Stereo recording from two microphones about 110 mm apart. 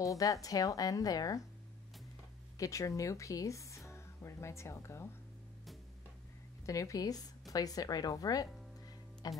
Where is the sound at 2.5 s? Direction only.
30° left (ahead or behind).